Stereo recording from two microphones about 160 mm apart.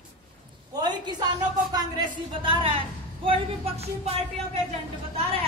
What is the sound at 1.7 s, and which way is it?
A man's voice, 25° right (ahead or behind).